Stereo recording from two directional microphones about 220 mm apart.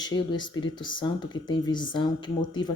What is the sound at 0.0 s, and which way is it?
Speech, 20° left (ahead or behind).